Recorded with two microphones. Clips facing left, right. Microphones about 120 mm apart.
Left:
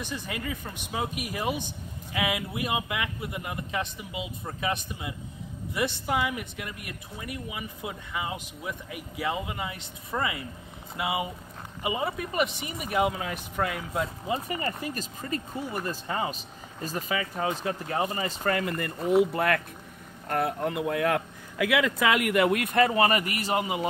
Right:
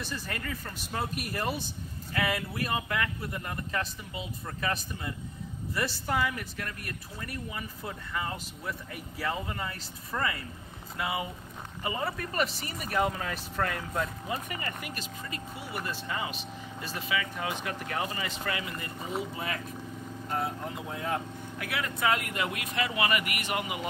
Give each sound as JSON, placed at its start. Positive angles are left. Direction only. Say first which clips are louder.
{"t": 0.0, "sound": "speech", "louder": "left 3 dB", "side_deg": 15}
{"t": 13.9, "sound": "speech", "louder": "left 3 dB", "side_deg": 20}
{"t": 14.6, "sound": "speech", "louder": "left 6 dB", "side_deg": 35}